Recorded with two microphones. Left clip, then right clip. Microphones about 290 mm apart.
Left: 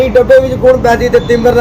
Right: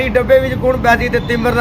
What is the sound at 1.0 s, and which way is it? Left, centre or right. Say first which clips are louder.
Speech: left 7 dB; right.